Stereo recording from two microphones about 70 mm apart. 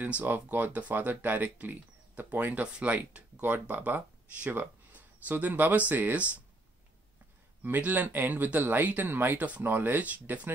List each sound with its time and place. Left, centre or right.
0.0 s speech: right
7.6 s speech: right